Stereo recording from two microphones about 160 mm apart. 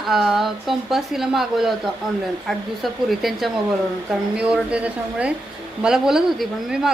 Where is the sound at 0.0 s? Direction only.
Centre (ahead or behind).